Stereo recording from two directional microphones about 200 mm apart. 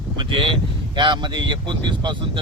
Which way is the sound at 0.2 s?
25° right (ahead or behind).